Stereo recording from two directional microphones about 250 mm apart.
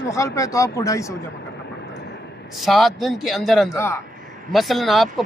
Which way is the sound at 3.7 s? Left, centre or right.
Centre.